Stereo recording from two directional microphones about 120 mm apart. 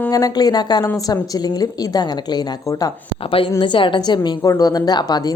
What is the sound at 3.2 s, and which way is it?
A woman's voice, 45° left (ahead or behind).